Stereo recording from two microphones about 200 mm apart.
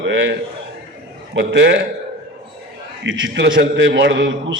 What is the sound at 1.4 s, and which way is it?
Speech, 60° right (ahead or behind).